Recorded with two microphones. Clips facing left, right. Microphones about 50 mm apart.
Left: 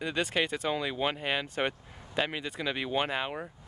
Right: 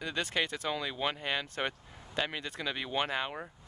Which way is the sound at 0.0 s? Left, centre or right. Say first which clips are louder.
Left 3 dB; centre.